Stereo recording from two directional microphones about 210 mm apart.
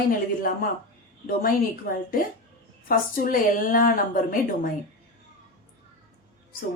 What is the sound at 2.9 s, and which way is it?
Speech, 40° left (ahead or behind).